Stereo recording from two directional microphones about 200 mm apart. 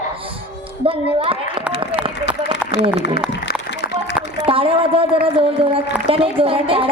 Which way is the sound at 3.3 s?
60° left (ahead or behind).